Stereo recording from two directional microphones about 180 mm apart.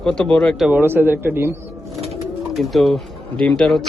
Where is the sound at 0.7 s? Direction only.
10° right (ahead or behind).